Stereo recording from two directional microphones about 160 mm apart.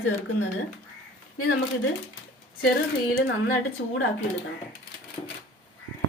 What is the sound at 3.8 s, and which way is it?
Speech, 90° left.